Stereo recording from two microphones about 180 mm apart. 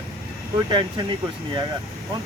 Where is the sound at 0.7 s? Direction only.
25° right (ahead or behind).